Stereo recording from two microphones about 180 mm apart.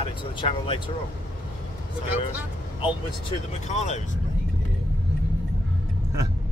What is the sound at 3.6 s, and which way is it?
Speech, 40° left (ahead or behind).